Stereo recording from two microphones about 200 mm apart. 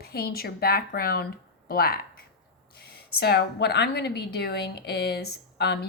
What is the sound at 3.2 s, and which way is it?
A woman's voice, 55° left (ahead or behind).